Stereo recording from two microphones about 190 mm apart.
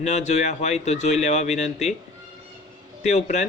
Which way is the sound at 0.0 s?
35° left (ahead or behind).